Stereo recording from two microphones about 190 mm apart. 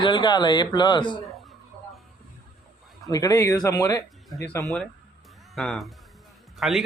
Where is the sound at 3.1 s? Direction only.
20° left (ahead or behind).